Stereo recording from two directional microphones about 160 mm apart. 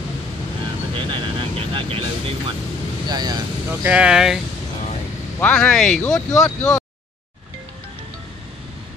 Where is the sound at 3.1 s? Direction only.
25° right (ahead or behind).